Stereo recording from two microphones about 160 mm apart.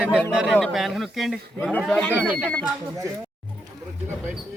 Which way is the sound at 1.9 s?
10° left (ahead or behind).